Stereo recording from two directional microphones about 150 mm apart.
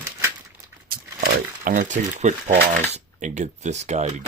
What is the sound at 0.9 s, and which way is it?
Crumpling, 75° right (ahead or behind).